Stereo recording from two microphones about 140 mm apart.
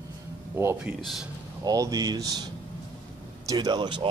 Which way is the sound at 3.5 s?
30° right (ahead or behind).